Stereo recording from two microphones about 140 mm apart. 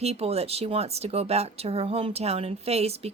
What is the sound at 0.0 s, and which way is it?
Speech, 45° right (ahead or behind).